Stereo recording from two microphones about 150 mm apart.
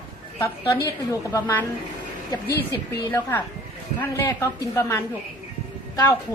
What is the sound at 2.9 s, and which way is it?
A woman's voice, 15° left (ahead or behind).